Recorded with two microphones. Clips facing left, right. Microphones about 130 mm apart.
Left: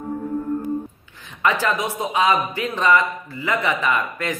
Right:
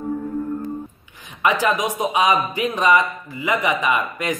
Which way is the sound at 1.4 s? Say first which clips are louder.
Right 2 dB; 15° right (ahead or behind).